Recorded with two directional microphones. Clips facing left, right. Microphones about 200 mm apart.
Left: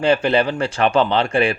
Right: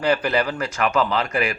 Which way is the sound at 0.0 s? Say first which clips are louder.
Left 4 dB; 25° left (ahead or behind).